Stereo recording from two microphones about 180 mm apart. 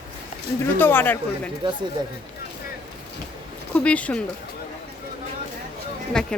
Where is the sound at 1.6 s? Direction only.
25° right (ahead or behind).